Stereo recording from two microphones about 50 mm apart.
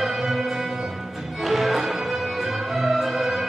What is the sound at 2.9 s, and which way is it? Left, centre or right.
Music, centre.